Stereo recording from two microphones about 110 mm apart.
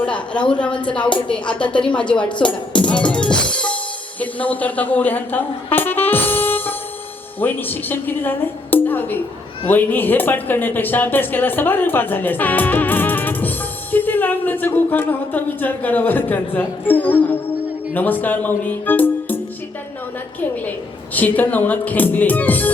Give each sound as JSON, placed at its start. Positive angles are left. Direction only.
{"t": 0.0, "sound": "a woman's voice", "side_deg": 10}
{"t": 20.7, "sound": "speech", "side_deg": 15}